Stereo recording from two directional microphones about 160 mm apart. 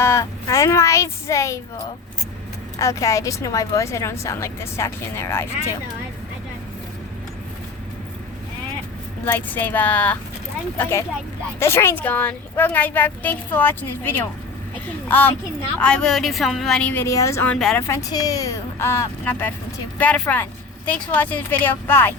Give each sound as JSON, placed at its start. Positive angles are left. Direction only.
{"t": 0.0, "sound": "a woman's voice", "side_deg": 20}
{"t": 2.7, "sound": "a woman's voice", "side_deg": 20}
{"t": 9.2, "sound": "a woman's voice", "side_deg": 15}